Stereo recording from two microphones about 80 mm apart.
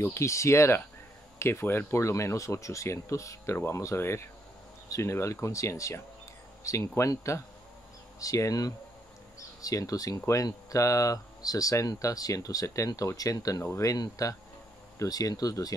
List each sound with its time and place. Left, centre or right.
0.0 s speech: left
3.5 s speech: left